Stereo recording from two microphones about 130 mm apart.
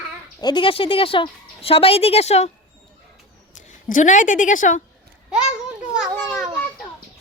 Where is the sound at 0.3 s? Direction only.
35° left (ahead or behind); by 2.5 s 55° left (ahead or behind).